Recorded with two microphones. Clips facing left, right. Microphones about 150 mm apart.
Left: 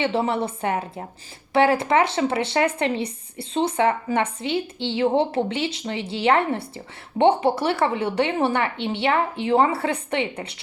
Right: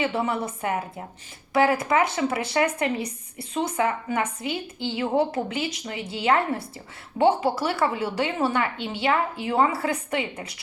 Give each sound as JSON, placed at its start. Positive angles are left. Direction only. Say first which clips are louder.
{"t": 0.0, "sound": "speech", "louder": "left 3 dB", "side_deg": 30}